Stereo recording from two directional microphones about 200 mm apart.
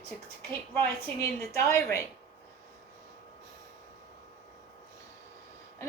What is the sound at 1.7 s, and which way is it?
Speech, 15° left (ahead or behind).